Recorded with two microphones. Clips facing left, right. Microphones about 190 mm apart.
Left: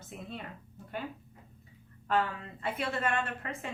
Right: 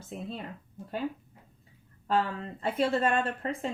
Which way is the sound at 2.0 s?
30° right (ahead or behind).